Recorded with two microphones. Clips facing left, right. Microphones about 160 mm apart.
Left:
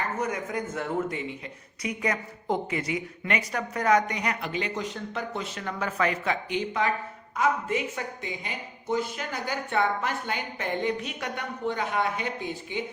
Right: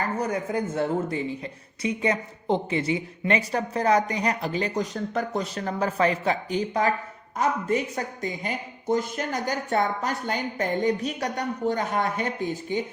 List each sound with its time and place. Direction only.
0.2 s speech: 30° right (ahead or behind)